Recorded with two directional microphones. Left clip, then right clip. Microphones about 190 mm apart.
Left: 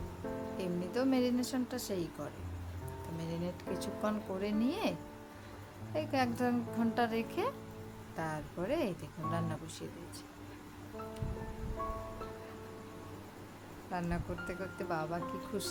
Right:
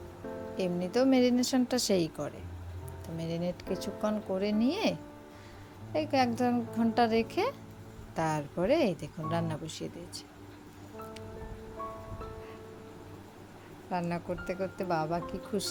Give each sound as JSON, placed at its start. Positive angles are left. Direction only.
{"t": 0.5, "sound": "speech", "side_deg": -25}
{"t": 13.9, "sound": "speech", "side_deg": -25}